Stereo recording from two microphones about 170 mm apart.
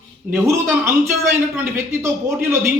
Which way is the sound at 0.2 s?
10° right (ahead or behind).